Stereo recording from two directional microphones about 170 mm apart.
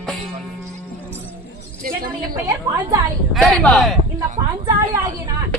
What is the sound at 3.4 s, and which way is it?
Speech, centre (ahead or behind).